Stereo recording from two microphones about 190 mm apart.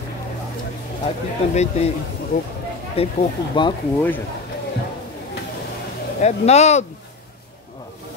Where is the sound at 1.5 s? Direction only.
35° left (ahead or behind).